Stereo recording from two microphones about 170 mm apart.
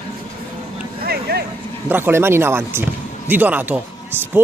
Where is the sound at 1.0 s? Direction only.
65° right (ahead or behind).